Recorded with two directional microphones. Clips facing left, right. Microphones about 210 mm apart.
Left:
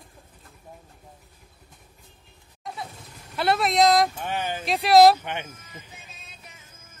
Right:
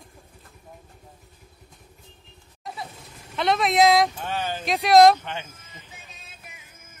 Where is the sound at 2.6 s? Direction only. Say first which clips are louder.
Even; centre (ahead or behind).